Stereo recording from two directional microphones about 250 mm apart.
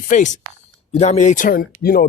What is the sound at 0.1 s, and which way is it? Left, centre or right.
Speech, left.